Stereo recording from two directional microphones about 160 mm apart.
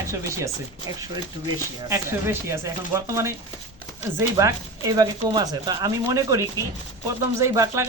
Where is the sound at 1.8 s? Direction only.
15° right (ahead or behind).